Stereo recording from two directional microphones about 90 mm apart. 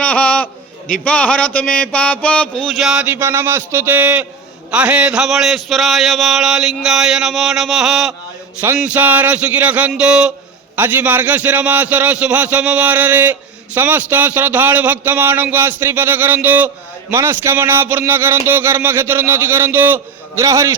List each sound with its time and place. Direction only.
0.0 s a sound: 15° left (ahead or behind); by 3.0 s centre (ahead or behind)
3.0 s speech: 20° right (ahead or behind); by 8.1 s 5° right (ahead or behind)
8.6 s a man's voice: 20° right (ahead or behind)
10.8 s a man's voice: 20° right (ahead or behind)
20.4 s a man's voice: 35° right (ahead or behind)